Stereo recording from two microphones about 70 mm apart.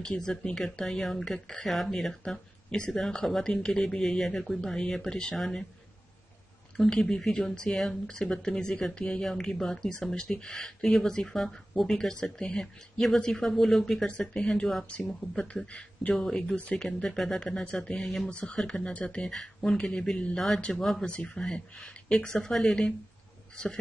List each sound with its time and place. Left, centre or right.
0.2 s speech: centre
6.8 s speech: centre